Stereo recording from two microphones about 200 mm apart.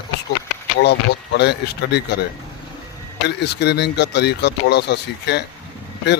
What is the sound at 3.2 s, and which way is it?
Speech, 55° left (ahead or behind).